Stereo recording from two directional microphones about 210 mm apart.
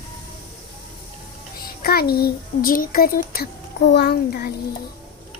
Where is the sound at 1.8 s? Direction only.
45° left (ahead or behind).